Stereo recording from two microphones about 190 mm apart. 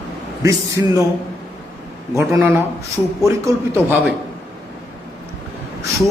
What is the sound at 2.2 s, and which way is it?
Speech, 15° right (ahead or behind).